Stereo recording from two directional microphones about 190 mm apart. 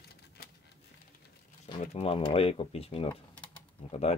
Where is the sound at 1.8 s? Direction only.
30° left (ahead or behind).